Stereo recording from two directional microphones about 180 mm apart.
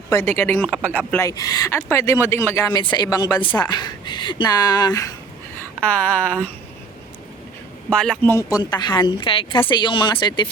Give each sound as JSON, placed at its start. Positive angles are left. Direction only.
{"t": 0.1, "sound": "speech", "side_deg": 15}
{"t": 5.8, "sound": "speech", "side_deg": 10}
{"t": 7.9, "sound": "speech", "side_deg": 5}